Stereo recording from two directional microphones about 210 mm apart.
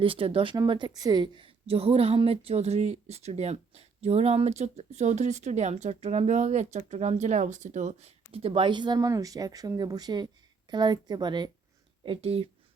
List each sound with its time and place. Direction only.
0.0 s a woman's voice: 25° right (ahead or behind)